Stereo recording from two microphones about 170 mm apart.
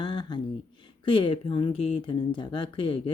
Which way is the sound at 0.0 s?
30° left (ahead or behind).